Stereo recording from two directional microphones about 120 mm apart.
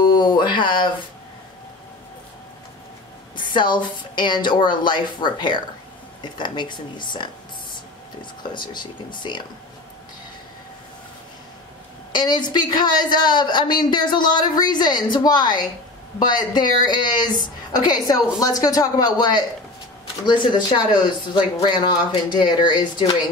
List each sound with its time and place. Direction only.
0.0 s speech: 40° left (ahead or behind)
3.3 s a man's voice: 40° left (ahead or behind)
12.1 s a man's voice: 40° left (ahead or behind)